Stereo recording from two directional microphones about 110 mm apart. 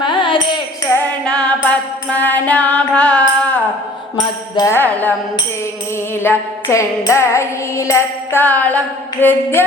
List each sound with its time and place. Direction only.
0.0 s carnatic music: 45° left (ahead or behind)
1.2 s music: 10° left (ahead or behind)
4.7 s music: 15° left (ahead or behind)
6.2 s music: 25° left (ahead or behind)